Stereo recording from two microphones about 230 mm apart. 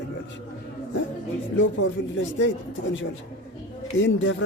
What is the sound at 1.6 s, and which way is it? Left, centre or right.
Speech, left.